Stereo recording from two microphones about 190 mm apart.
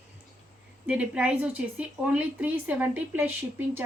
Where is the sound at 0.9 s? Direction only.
5° right (ahead or behind).